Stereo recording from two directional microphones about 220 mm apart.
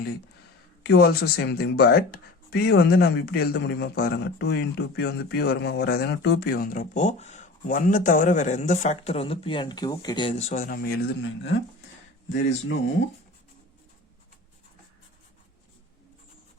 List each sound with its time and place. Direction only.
0.9 s speech: 45° left (ahead or behind)